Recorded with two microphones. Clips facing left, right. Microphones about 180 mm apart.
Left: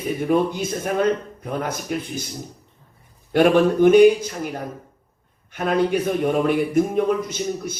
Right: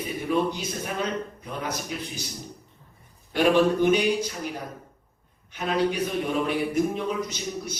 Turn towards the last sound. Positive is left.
turn(degrees=50)  # may be behind; listen again after turning